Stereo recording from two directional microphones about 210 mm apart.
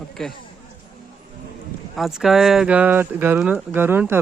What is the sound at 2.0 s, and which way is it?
Speech, centre (ahead or behind).